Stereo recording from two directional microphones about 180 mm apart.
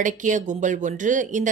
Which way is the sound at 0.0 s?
45° right (ahead or behind).